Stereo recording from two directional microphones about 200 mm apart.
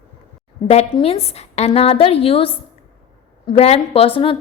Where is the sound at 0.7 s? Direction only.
30° left (ahead or behind).